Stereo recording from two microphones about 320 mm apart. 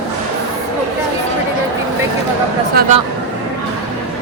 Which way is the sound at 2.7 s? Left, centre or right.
Right.